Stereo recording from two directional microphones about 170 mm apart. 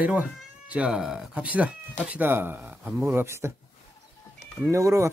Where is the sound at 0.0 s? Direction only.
10° right (ahead or behind).